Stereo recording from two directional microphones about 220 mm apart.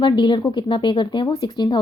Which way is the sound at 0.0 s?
20° left (ahead or behind).